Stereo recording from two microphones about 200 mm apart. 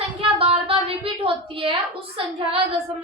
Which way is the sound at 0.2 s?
30° right (ahead or behind).